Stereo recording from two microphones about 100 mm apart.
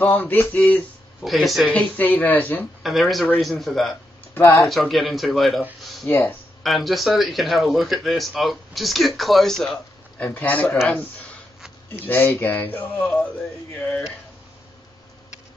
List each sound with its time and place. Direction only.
0.0 s a sound: 20° left (ahead or behind)
1.2 s speech: centre (ahead or behind)
1.7 s speech: 15° left (ahead or behind)
2.8 s speech: centre (ahead or behind)
4.3 s speech: 25° left (ahead or behind)
4.6 s speech: centre (ahead or behind)
6.0 s a sound: 25° left (ahead or behind)
6.6 s speech: centre (ahead or behind)
10.1 s speech: 15° left (ahead or behind)
11.9 s speech: 20° left (ahead or behind)